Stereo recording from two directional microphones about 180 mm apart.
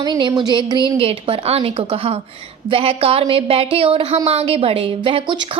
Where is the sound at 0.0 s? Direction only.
25° right (ahead or behind).